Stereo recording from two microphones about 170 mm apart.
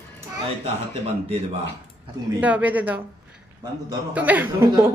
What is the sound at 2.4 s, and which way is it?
Speech, 10° right (ahead or behind).